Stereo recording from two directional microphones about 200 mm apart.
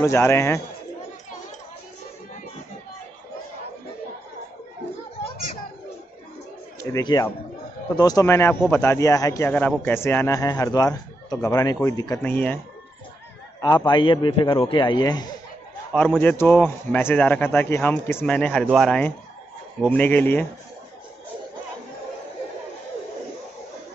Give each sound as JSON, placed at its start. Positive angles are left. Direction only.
{"t": 0.0, "sound": "speech", "side_deg": 15}
{"t": 6.8, "sound": "a man's voice", "side_deg": 20}
{"t": 13.6, "sound": "a man's voice", "side_deg": 20}
{"t": 15.9, "sound": "speech", "side_deg": 5}